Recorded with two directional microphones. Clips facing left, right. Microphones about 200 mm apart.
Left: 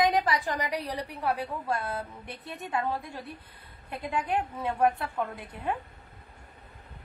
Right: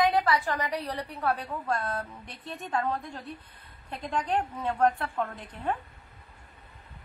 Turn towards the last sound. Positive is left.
turn(degrees=10)  # may be behind; listen again after turning